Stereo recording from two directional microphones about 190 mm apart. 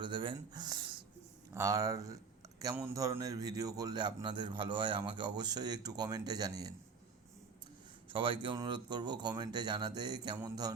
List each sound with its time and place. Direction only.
0.0 s a sound: 25° right (ahead or behind)
1.5 s a man's voice: 15° right (ahead or behind)
8.1 s a man's voice: 25° right (ahead or behind)